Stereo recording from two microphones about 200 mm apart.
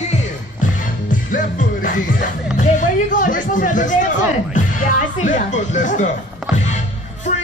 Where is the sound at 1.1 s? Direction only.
40° left (ahead or behind).